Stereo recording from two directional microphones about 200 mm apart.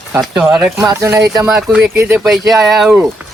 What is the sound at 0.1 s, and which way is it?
Speech, 5° right (ahead or behind).